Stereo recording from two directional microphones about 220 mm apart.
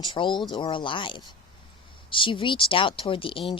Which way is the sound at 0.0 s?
20° left (ahead or behind).